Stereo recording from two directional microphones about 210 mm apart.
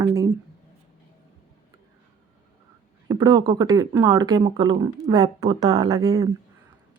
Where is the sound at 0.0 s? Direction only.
15° right (ahead or behind).